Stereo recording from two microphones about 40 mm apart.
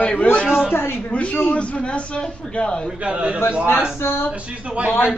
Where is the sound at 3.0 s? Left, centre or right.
Right.